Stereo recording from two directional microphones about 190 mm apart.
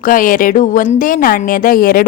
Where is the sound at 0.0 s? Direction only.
45° left (ahead or behind).